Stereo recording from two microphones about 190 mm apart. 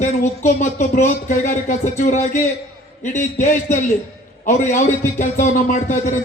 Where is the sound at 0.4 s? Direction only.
40° left (ahead or behind).